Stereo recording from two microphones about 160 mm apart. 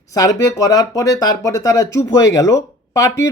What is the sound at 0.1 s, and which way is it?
Speech, 20° left (ahead or behind).